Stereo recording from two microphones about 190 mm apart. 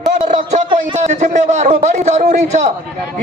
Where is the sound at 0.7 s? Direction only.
40° right (ahead or behind).